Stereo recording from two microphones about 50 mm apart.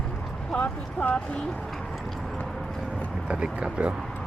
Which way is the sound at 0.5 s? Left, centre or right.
Left.